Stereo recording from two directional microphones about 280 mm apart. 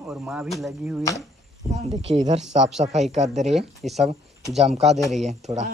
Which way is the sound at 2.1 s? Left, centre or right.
Right.